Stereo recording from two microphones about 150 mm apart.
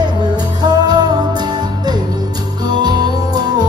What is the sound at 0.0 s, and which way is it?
Music, 25° right (ahead or behind).